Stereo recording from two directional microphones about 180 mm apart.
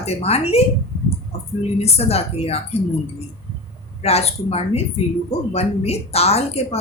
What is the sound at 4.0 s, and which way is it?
A woman's voice, 35° left (ahead or behind).